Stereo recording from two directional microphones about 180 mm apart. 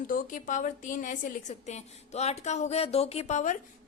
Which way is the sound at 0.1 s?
50° left (ahead or behind).